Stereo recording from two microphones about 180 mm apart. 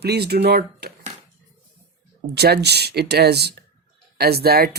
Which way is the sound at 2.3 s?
65° right (ahead or behind).